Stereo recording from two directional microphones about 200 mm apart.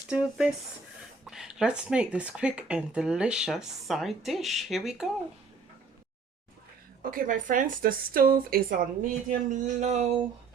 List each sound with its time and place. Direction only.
0.1 s speech: 5° right (ahead or behind)
7.0 s speech: 45° right (ahead or behind)